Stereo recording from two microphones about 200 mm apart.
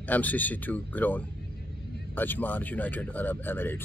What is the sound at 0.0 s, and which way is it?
Speech, 10° left (ahead or behind).